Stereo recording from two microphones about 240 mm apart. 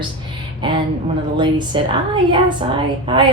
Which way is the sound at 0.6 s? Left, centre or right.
Centre.